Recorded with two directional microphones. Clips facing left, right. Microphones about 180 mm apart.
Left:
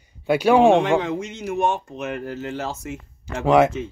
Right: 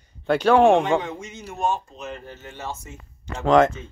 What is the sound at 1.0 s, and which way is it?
A man's voice, 85° left.